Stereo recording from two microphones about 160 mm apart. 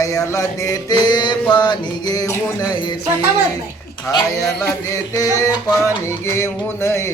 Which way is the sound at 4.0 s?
20° left (ahead or behind).